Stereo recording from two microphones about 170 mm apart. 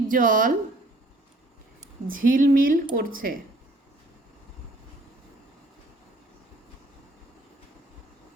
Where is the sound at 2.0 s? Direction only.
55° right (ahead or behind).